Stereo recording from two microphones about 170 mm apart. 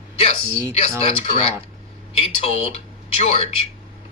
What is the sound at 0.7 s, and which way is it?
Speech, 40° left (ahead or behind).